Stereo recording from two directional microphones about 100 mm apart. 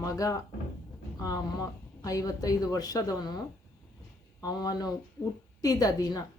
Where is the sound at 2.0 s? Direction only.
35° left (ahead or behind).